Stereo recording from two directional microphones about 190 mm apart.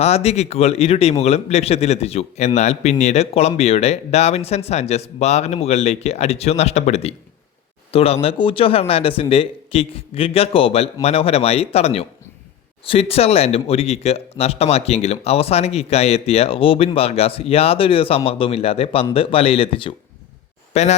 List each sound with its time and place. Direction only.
0.0 s speech: 35° left (ahead or behind)